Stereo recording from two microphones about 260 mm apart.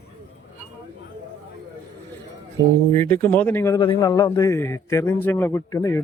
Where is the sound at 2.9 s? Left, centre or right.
Centre.